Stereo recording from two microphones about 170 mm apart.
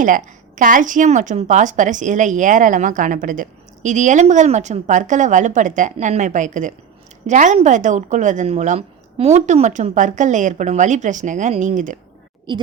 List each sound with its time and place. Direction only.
0.0 s a woman's voice: 50° right (ahead or behind)